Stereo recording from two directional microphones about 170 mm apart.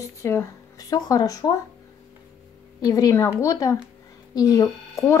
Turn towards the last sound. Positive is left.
turn(degrees=15)  # may be behind; listen again after turning